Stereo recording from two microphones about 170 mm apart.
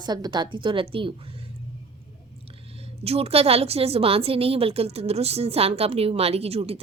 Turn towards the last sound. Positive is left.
turn(degrees=-35)  # may be behind; listen again after turning